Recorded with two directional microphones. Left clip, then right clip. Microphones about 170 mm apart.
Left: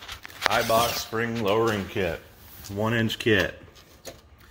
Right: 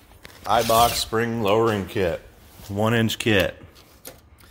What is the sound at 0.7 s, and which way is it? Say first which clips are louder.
Rub: right 5 dB; 45° right (ahead or behind).